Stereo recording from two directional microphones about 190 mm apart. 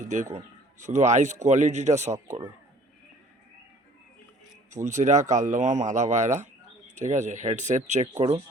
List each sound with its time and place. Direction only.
0.0 s a man's voice: 40° right (ahead or behind)
4.7 s a man's voice: 40° right (ahead or behind)